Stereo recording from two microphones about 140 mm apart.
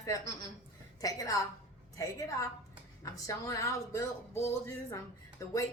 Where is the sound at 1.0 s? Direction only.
25° left (ahead or behind).